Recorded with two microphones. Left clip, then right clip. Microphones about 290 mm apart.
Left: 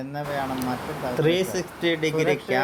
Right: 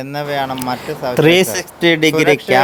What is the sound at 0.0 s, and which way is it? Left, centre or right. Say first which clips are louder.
Speech: right 9 dB; right.